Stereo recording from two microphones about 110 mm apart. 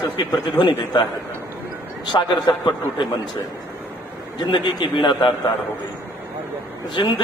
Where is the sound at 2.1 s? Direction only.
45° left (ahead or behind).